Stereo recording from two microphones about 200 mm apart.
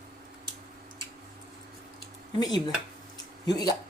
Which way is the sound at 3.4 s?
20° left (ahead or behind).